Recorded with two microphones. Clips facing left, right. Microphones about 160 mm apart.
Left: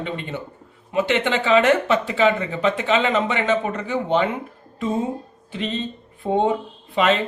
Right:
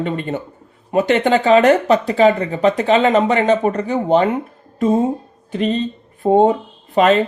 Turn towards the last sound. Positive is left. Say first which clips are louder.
# right 6 dB
turn(degrees=-40)  # may be behind; listen again after turning